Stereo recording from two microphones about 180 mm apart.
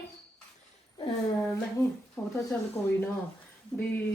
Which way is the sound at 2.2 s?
10° left (ahead or behind).